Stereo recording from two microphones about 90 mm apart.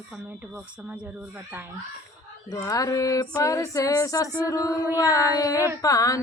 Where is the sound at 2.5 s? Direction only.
40° left (ahead or behind).